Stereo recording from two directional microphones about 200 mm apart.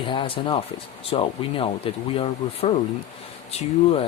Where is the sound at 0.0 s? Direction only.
25° left (ahead or behind).